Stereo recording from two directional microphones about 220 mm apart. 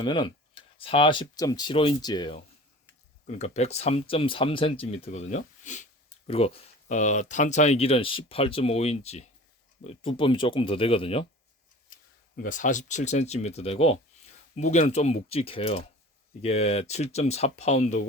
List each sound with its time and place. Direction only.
0.0 s speech: 20° left (ahead or behind)
3.2 s speech: 30° left (ahead or behind)
12.4 s speech: 35° left (ahead or behind)